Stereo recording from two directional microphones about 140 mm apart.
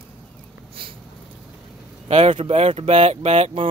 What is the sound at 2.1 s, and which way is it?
Speech, 50° right (ahead or behind).